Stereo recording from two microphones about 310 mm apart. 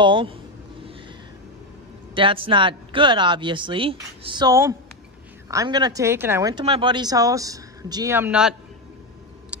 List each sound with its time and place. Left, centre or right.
0.0 s speech: centre
2.1 s speech: centre
9.5 s a sound: centre